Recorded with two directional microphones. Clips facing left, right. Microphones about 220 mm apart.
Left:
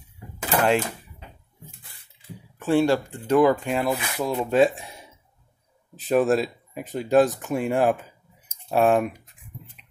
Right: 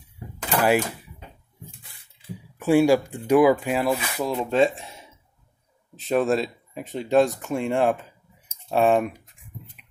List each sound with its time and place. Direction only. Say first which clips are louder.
0.6 s speech: right 1 dB; 10° right (ahead or behind)
2.6 s speech: right 3 dB; 10° right (ahead or behind)